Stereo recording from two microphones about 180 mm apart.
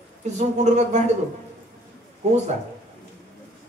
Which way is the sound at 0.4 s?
40° right (ahead or behind).